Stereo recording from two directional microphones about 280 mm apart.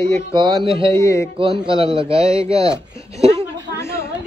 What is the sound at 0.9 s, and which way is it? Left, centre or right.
Speech, centre.